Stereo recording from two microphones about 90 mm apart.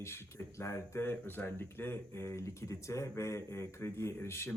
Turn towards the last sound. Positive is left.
turn(degrees=30)  # may be behind; listen again after turning